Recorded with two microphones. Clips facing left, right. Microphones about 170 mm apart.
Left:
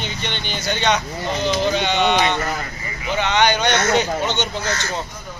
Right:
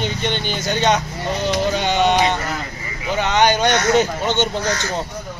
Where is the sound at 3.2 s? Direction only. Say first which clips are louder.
Right 2 dB; 45° right (ahead or behind).